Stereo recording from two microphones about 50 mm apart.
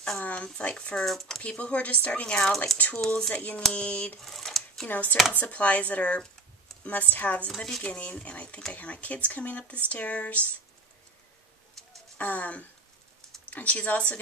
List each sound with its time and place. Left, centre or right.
0.2 s speech: left
0.9 s speech: centre
1.4 s speech: left
3.3 s speech: left
4.2 s a sound: centre
4.8 s speech: left
7.5 s speech: centre
7.8 s speech: left
12.2 s speech: left